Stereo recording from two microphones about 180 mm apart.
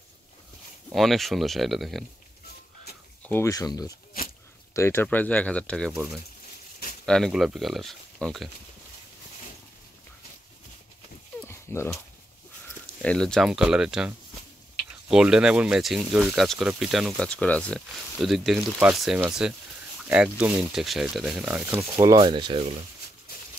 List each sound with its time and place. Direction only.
0.9 s speech: centre (ahead or behind)
3.2 s speech: 10° left (ahead or behind)
7.1 s speech: centre (ahead or behind)
11.4 s dog: 15° left (ahead or behind)
13.0 s speech: 5° left (ahead or behind)
22.0 s speech: 25° right (ahead or behind)